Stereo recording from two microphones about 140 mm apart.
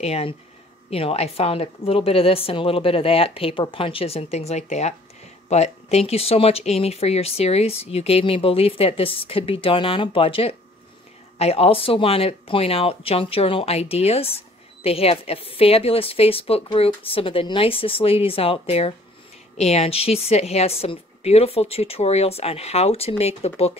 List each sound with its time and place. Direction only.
0.0 s speech: 45° left (ahead or behind)